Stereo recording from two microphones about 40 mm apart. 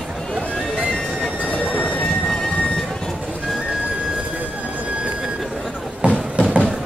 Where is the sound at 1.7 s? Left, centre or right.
Left.